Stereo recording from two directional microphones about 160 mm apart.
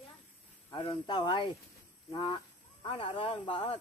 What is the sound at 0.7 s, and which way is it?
Speech, 30° left (ahead or behind).